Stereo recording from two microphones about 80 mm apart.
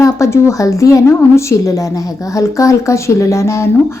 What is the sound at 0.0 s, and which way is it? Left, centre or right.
A woman's voice, left.